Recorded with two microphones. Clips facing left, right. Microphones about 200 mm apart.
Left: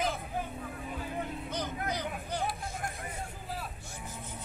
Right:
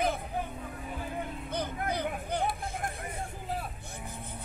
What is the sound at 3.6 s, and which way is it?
Vehicle, 55° right (ahead or behind).